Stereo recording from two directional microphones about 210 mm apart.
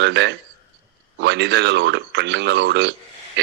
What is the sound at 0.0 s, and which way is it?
Speech, 55° right (ahead or behind).